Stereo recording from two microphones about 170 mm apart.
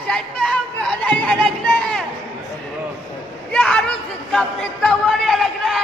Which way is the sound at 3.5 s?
5° left (ahead or behind).